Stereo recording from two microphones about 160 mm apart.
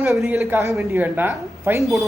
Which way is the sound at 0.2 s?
Centre (ahead or behind).